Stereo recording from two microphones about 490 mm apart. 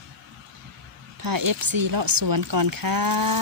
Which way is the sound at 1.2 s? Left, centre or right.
Right.